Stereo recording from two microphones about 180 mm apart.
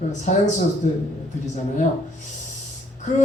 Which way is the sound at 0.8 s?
50° left (ahead or behind).